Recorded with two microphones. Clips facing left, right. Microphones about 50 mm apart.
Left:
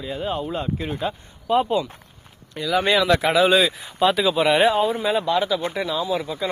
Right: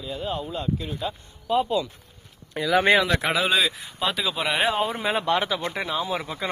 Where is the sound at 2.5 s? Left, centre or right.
Centre.